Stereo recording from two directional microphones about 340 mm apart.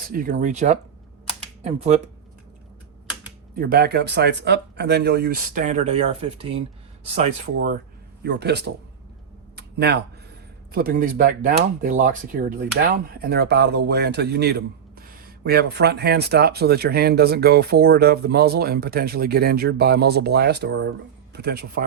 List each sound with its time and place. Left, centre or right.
0.1 s speech: right
3.5 s speech: right
8.2 s speech: right
9.6 s a sound: right
10.7 s speech: right